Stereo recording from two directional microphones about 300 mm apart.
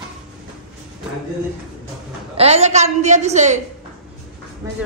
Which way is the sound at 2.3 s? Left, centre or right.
Right.